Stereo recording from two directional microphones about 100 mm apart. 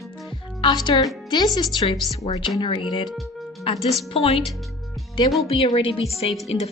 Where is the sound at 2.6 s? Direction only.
55° left (ahead or behind).